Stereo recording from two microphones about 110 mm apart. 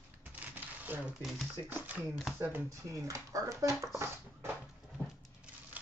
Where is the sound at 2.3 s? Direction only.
20° right (ahead or behind).